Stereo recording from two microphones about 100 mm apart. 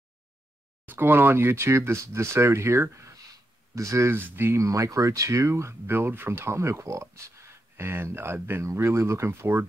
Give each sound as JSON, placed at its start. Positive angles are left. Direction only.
{"t": 0.8, "sound": "speech", "side_deg": -20}